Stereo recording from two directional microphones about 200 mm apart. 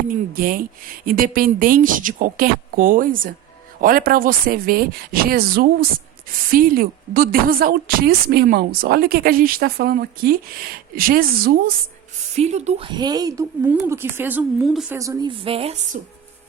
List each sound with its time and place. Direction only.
0.1 s a woman's voice: 45° right (ahead or behind)
12.3 s speech: 35° right (ahead or behind); by 14.9 s 5° right (ahead or behind)
14.9 s a woman's voice: 15° right (ahead or behind); by 16.0 s 30° right (ahead or behind)